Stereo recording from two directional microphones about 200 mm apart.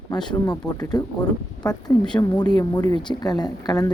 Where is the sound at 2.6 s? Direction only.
20° left (ahead or behind).